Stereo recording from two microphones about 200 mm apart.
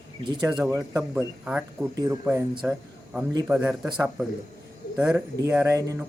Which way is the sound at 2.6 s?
5° right (ahead or behind).